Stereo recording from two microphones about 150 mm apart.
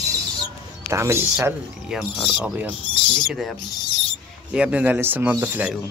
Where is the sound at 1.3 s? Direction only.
5° right (ahead or behind).